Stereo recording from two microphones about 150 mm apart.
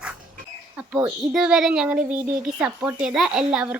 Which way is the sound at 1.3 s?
5° right (ahead or behind).